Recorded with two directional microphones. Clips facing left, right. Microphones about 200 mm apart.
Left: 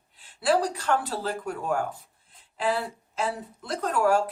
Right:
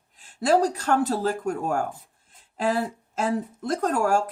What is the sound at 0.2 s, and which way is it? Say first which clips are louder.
Speech: right 3 dB; 45° right (ahead or behind).